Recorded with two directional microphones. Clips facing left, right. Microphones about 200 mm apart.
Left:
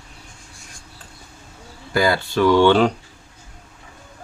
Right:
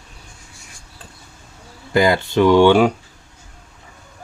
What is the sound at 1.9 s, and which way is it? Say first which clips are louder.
Speech: right 3 dB; 20° right (ahead or behind).